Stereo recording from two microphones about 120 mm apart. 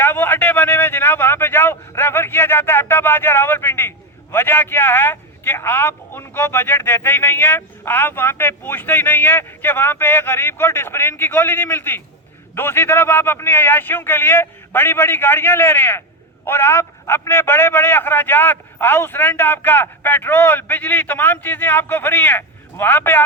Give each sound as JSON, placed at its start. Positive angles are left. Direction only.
{"t": 0.0, "sound": "a man's voice", "side_deg": 20}